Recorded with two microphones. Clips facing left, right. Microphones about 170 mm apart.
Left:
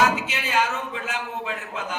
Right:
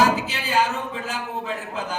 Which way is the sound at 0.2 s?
35° right (ahead or behind).